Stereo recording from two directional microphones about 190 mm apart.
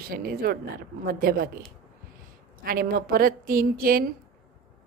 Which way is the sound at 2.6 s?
50° right (ahead or behind).